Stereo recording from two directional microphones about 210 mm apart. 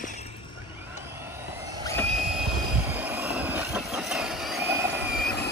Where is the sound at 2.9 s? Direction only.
10° right (ahead or behind).